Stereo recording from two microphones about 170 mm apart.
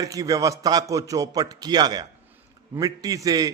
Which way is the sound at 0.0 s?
20° right (ahead or behind).